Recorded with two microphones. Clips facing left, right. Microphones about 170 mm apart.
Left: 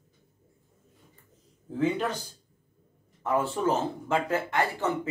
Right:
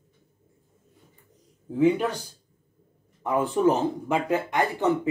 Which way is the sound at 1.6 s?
15° right (ahead or behind).